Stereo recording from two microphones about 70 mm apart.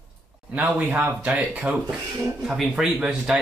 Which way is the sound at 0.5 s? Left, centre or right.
Right.